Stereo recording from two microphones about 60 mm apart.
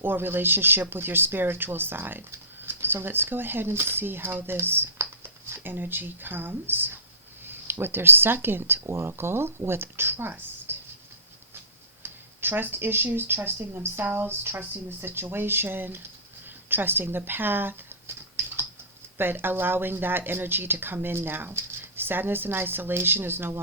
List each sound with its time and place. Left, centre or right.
0.0 s speech: right
12.0 s a sound: right
13.1 s speech: right
19.1 s speech: right